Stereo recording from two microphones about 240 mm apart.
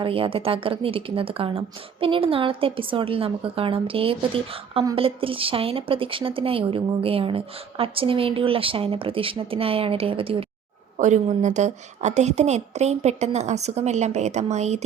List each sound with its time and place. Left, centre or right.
0.0 s a woman's voice: right